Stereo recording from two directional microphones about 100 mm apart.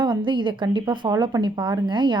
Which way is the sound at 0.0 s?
50° right (ahead or behind).